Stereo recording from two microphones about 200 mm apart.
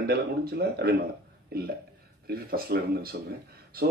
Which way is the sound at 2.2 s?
50° right (ahead or behind).